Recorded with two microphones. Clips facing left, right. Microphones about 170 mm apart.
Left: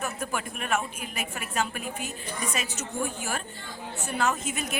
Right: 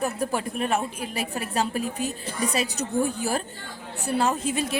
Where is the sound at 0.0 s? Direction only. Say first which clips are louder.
Right 6 dB; 35° right (ahead or behind).